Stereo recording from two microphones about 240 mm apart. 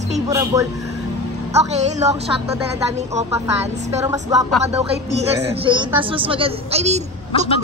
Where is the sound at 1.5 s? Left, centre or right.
Right.